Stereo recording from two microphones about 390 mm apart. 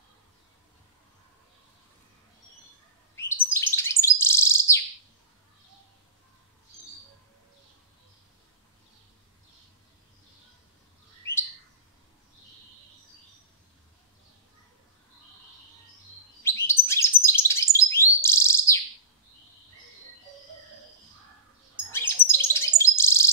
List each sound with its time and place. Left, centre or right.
3.2 s bird: centre
11.3 s bird: centre
16.4 s bird: centre
21.9 s bird: centre